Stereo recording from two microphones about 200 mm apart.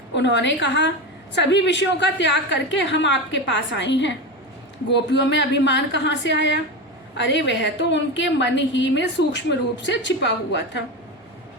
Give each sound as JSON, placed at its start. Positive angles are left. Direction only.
{"t": 0.1, "sound": "a woman's voice", "side_deg": 65}